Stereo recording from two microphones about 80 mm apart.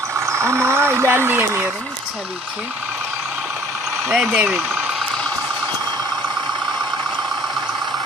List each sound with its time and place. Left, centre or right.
0.2 s speech: right
4.1 s speech: centre